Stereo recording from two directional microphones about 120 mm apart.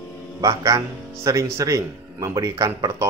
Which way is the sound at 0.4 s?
25° right (ahead or behind).